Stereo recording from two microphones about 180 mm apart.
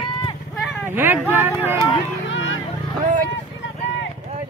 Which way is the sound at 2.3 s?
90° left.